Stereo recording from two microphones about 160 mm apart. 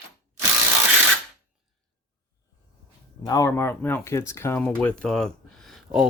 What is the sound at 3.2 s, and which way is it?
Speech, 25° left (ahead or behind).